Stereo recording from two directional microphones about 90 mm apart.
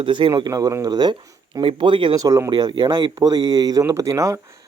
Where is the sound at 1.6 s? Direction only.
65° right (ahead or behind).